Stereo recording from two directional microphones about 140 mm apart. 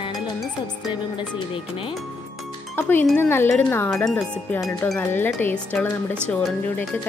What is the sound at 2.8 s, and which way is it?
Speech, 15° left (ahead or behind).